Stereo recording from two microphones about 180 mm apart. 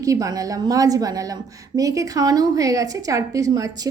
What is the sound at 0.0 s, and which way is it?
A woman's voice, 20° right (ahead or behind).